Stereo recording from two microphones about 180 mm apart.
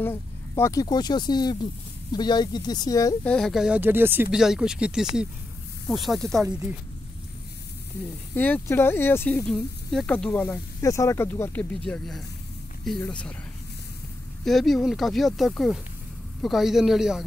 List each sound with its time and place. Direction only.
0.0 s speech: 15° left (ahead or behind)
3.3 s speech: 5° left (ahead or behind)
8.4 s speech: 10° left (ahead or behind)
14.4 s speech: centre (ahead or behind)